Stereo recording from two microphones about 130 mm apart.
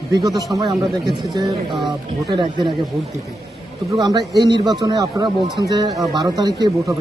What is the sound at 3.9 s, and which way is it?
Speech, 30° right (ahead or behind).